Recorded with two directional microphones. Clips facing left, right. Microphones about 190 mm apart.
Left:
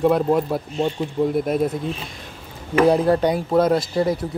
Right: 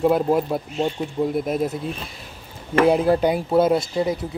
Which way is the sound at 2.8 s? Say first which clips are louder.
Left 1 dB; 5° right (ahead or behind).